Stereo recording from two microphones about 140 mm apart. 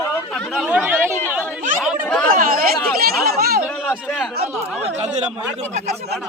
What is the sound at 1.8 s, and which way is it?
Speech, 5° left (ahead or behind).